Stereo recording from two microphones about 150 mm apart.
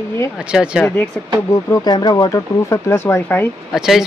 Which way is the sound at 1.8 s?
25° left (ahead or behind).